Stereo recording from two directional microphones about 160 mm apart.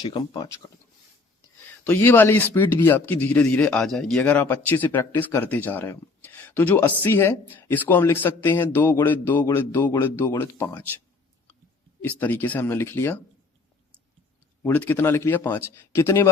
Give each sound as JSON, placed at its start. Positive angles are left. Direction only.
{"t": 0.0, "sound": "speech", "side_deg": 30}
{"t": 1.8, "sound": "speech", "side_deg": 15}
{"t": 12.0, "sound": "speech", "side_deg": 10}
{"t": 14.6, "sound": "speech", "side_deg": 10}